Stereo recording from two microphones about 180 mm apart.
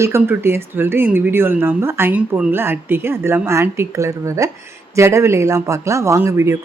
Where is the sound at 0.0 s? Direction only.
15° right (ahead or behind).